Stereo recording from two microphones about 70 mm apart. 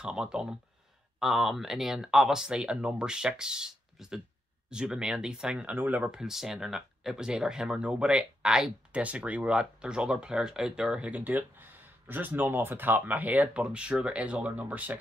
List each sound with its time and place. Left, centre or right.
0.0 s speech: centre
5.7 s speech: right
6.0 s speech: centre